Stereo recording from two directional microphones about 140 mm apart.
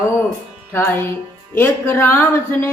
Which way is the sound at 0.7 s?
15° left (ahead or behind).